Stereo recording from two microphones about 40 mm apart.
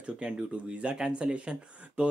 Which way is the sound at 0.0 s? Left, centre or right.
Right.